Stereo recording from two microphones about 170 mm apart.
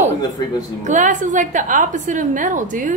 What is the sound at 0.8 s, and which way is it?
A woman's voice, 45° right (ahead or behind).